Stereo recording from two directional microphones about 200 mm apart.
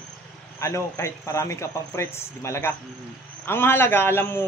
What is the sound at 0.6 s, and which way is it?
A man's voice, 15° left (ahead or behind).